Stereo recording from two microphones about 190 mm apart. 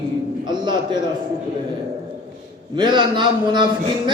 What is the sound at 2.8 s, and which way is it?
Speech, 25° right (ahead or behind).